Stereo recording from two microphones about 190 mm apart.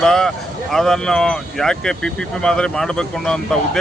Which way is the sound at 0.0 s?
5° left (ahead or behind).